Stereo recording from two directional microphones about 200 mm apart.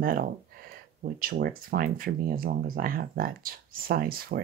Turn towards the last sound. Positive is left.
turn(degrees=-50)  # may be behind; listen again after turning